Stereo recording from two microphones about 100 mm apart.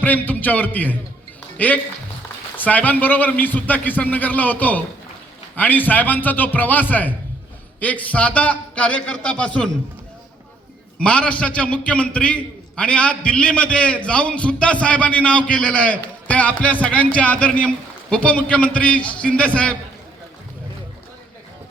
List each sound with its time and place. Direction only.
0.0 s a man's voice: 15° left (ahead or behind)
11.0 s a man's voice: 10° left (ahead or behind)